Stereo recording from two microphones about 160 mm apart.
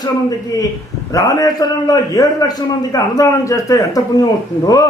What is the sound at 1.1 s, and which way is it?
A man's voice, 20° left (ahead or behind).